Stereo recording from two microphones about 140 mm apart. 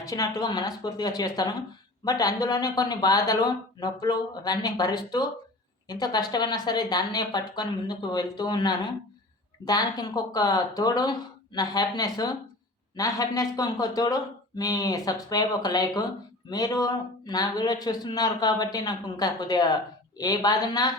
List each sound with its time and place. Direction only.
0.0 s a man's voice: 25° left (ahead or behind)